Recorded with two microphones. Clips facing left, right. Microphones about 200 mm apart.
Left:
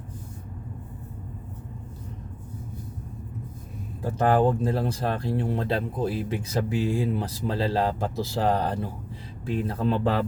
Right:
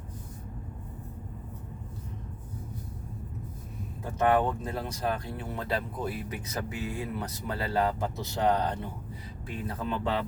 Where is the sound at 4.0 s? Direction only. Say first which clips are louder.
Left 4 dB; 30° left (ahead or behind).